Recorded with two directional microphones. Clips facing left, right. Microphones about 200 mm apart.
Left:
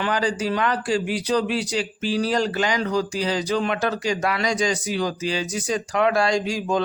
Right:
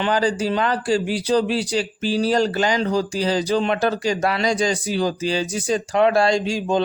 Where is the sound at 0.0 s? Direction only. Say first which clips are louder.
Right 3 dB; 30° right (ahead or behind).